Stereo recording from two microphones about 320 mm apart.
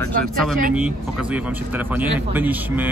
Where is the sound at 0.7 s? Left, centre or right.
Centre.